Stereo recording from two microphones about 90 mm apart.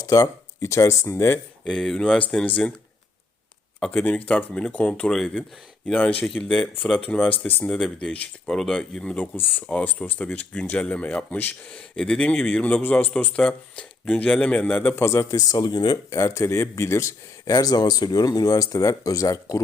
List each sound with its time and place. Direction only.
0.0 s speech: 40° left (ahead or behind)
1.6 s speech: 5° left (ahead or behind)
3.8 s speech: 5° left (ahead or behind)
9.2 s speech: 20° left (ahead or behind)
15.0 s speech: 35° left (ahead or behind); by 16.0 s 50° left (ahead or behind)
16.0 s speech: 35° left (ahead or behind)
17.5 s speech: 45° left (ahead or behind)